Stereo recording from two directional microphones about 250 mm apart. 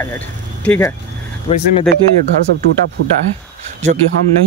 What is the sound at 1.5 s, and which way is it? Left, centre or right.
Speech, left.